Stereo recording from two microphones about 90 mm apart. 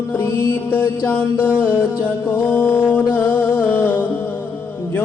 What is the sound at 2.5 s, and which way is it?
Music, 20° left (ahead or behind).